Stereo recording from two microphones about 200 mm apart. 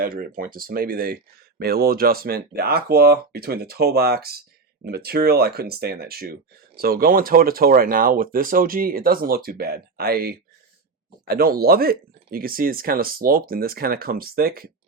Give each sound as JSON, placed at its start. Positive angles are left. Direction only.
{"t": 0.0, "sound": "speech", "side_deg": -45}